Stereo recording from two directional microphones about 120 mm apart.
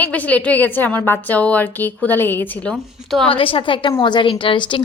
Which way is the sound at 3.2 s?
50° left (ahead or behind).